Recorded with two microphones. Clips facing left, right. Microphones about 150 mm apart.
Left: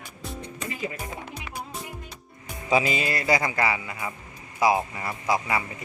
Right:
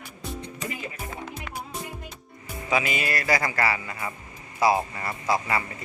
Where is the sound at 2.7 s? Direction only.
25° left (ahead or behind).